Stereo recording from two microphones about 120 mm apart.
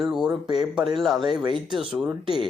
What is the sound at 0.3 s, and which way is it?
Speech, 35° right (ahead or behind).